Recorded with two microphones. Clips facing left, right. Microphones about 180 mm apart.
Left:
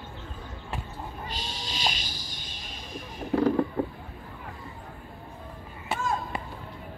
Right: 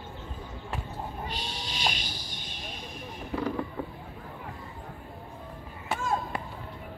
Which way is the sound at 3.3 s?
45° left (ahead or behind).